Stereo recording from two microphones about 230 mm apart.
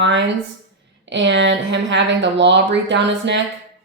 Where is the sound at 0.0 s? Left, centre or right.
Right.